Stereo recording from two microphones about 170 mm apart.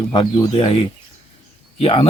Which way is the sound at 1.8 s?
35° left (ahead or behind).